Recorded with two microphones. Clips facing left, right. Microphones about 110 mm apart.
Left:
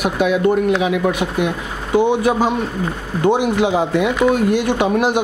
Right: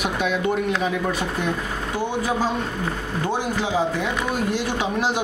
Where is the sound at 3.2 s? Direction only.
60° left (ahead or behind).